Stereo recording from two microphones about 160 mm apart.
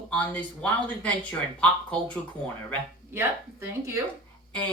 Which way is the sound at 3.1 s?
15° right (ahead or behind).